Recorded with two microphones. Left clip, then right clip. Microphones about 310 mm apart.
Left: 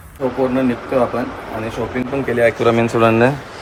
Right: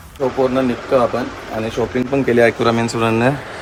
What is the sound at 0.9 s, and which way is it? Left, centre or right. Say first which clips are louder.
Speech: right 3 dB; centre.